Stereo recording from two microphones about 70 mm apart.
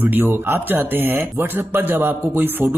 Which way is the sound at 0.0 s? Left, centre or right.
Right.